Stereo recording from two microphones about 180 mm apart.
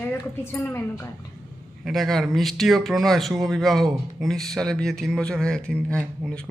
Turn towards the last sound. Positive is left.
turn(degrees=5)  # may be behind; listen again after turning